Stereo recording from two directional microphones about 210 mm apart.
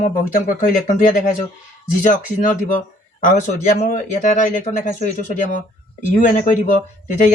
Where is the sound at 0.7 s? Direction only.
40° left (ahead or behind).